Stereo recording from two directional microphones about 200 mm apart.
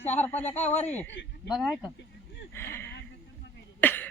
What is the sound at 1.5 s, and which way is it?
Speech, centre (ahead or behind).